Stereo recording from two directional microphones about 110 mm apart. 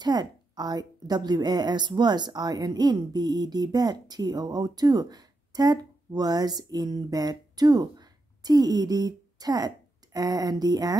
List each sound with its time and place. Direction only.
0.0 s a woman's voice: 40° right (ahead or behind)